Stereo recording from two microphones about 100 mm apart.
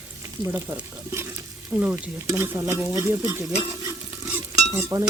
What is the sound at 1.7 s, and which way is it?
Speech, 15° right (ahead or behind).